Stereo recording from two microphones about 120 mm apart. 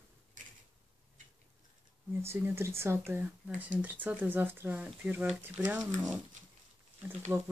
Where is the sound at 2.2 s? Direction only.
20° right (ahead or behind).